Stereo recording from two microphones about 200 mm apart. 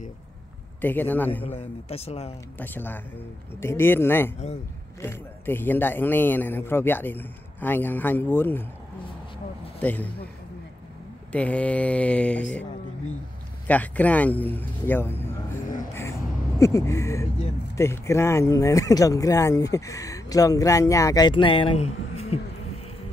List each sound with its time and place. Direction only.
0.7 s speech: 10° left (ahead or behind)
1.9 s speech: 30° left (ahead or behind)
2.6 s speech: 10° left (ahead or behind)
9.8 s a man's voice: 10° left (ahead or behind)
11.3 s speech: 5° left (ahead or behind)
13.7 s speech: 5° left (ahead or behind)
15.9 s a sound: 15° left (ahead or behind)
17.7 s speech: 15° left (ahead or behind); by 22.4 s 30° left (ahead or behind)